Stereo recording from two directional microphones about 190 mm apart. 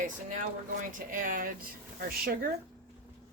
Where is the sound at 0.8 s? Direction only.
45° right (ahead or behind).